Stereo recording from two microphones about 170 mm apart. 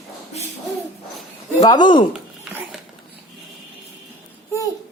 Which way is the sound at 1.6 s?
25° left (ahead or behind).